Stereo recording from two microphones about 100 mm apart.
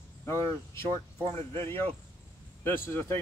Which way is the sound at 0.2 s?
25° left (ahead or behind).